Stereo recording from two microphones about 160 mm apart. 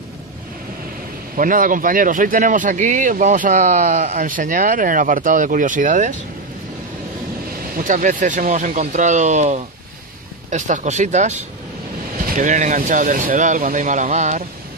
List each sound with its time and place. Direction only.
1.3 s speech: 60° right (ahead or behind)
7.7 s speech: 55° right (ahead or behind)